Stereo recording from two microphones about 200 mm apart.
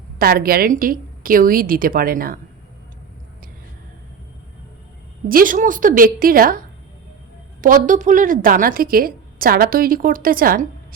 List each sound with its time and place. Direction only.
0.2 s a woman's voice: 50° right (ahead or behind)
5.3 s a woman's voice: 45° right (ahead or behind)
7.6 s a woman's voice: 40° right (ahead or behind)